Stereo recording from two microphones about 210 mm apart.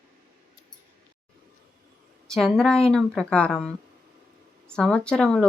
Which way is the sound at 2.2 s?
Centre (ahead or behind).